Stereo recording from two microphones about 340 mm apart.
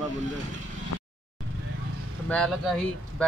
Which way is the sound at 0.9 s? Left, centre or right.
Left.